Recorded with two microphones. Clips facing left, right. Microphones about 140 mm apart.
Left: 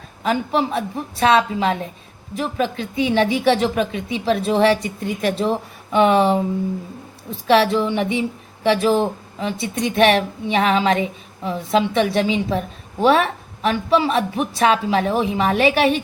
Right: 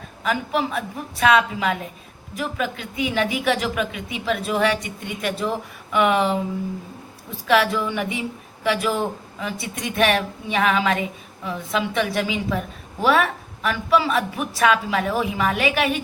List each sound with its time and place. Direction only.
0.2 s a woman's voice: 30° left (ahead or behind)
7.4 s a woman's voice: 30° left (ahead or behind)